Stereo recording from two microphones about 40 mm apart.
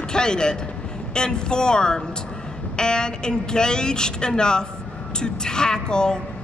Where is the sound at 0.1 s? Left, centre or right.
Centre.